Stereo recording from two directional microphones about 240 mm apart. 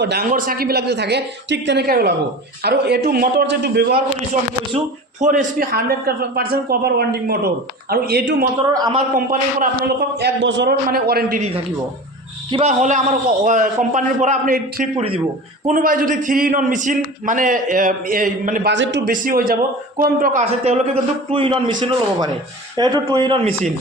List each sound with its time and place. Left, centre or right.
0.0 s a man's voice: right
5.2 s a man's voice: right
8.7 s a man's voice: centre
9.1 s a man's voice: right
12.5 s a man's voice: right
18.7 s speech: right
19.1 s a man's voice: right